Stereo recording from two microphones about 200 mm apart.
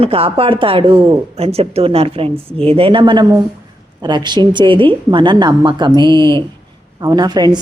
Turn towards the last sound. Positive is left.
turn(degrees=-20)  # may be behind; listen again after turning